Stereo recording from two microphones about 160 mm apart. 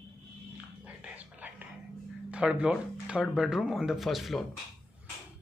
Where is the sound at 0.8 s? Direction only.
10° right (ahead or behind).